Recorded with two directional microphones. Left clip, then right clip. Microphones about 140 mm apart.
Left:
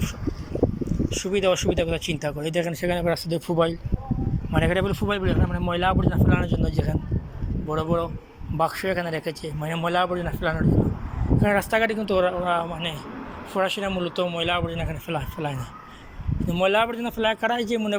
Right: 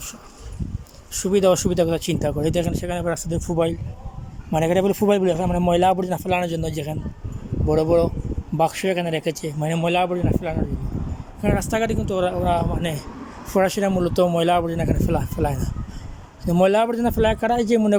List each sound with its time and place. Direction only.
1.2 s speech: 30° right (ahead or behind); by 3.8 s 15° right (ahead or behind)
4.5 s speech: 35° right (ahead or behind)
4.9 s a man's voice: 45° right (ahead or behind); by 6.9 s 25° right (ahead or behind)
7.7 s speech: 40° right (ahead or behind)
8.5 s speech: 25° right (ahead or behind)